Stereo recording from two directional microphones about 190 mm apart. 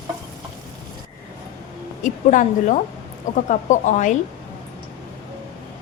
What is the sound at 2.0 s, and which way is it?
A woman's voice, 40° left (ahead or behind).